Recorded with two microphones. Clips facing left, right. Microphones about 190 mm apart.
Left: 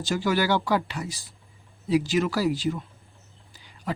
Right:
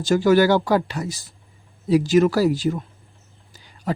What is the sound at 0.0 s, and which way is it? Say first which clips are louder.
Speech: right 9 dB; 45° right (ahead or behind).